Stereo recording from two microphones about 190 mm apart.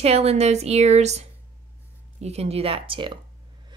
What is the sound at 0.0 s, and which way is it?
Speech, 35° right (ahead or behind).